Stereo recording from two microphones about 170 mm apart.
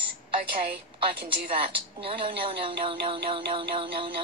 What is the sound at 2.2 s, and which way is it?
Music, 30° right (ahead or behind).